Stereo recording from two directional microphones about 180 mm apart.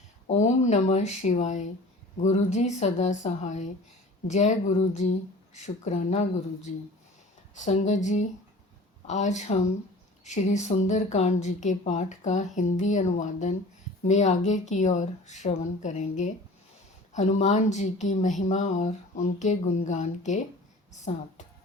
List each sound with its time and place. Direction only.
0.3 s speech: 40° left (ahead or behind)
7.5 s a sound: 40° left (ahead or behind)
9.0 s speech: 40° left (ahead or behind)